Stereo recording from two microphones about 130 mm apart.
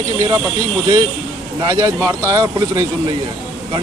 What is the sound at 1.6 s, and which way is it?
A man's voice, 30° right (ahead or behind).